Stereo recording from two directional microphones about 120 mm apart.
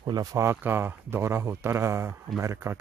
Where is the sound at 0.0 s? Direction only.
30° right (ahead or behind).